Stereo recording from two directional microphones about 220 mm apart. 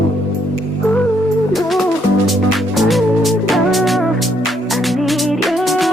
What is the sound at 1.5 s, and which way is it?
Music, centre (ahead or behind).